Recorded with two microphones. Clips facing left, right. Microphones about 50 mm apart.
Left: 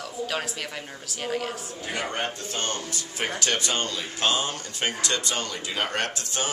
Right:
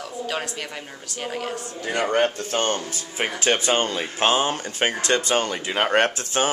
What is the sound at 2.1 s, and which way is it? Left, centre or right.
Speech, right.